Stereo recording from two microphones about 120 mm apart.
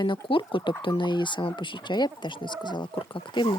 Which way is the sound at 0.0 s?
45° left (ahead or behind).